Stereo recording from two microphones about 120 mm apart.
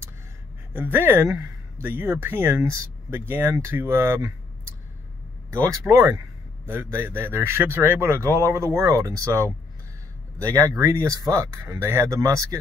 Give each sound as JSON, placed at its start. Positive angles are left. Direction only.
{"t": 0.7, "sound": "speech", "side_deg": -15}
{"t": 5.5, "sound": "speech", "side_deg": -25}